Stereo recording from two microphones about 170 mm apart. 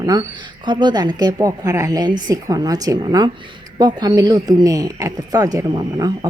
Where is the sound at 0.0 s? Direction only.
25° right (ahead or behind).